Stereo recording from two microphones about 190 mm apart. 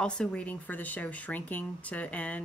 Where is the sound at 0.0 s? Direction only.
5° left (ahead or behind).